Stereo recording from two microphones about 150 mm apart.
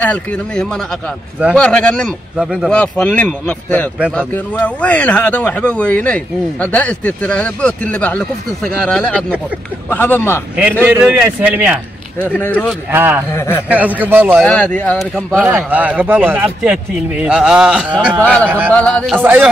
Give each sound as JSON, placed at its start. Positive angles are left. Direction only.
{"t": 0.0, "sound": "speech", "side_deg": 10}
{"t": 2.7, "sound": "speech", "side_deg": 10}
{"t": 10.5, "sound": "speech", "side_deg": -10}
{"t": 12.2, "sound": "speech", "side_deg": 10}
{"t": 12.9, "sound": "speech", "side_deg": -15}
{"t": 13.3, "sound": "speech", "side_deg": 15}
{"t": 13.7, "sound": "speech", "side_deg": -10}
{"t": 14.4, "sound": "speech", "side_deg": 10}
{"t": 15.4, "sound": "speech", "side_deg": -10}
{"t": 18.2, "sound": "speech", "side_deg": 10}
{"t": 19.1, "sound": "speech", "side_deg": -15}